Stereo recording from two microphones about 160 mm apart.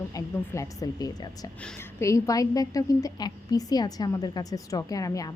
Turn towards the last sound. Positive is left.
turn(degrees=20)  # may be behind; listen again after turning